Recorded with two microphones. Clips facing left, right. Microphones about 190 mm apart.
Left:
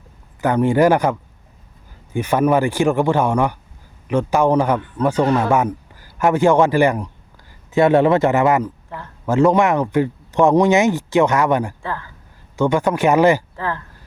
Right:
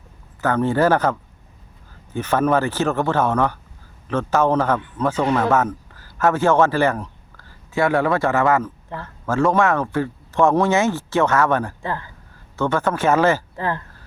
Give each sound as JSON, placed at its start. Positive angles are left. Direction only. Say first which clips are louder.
{"t": 0.4, "sound": "speech", "louder": "left 3 dB", "side_deg": 15}
{"t": 2.1, "sound": "a man's voice", "louder": "left 2 dB", "side_deg": 10}
{"t": 11.8, "sound": "speech", "louder": "even", "side_deg": -20}
{"t": 12.5, "sound": "speech", "louder": "left 4 dB", "side_deg": 15}
{"t": 13.6, "sound": "speech", "louder": "right 1 dB", "side_deg": -20}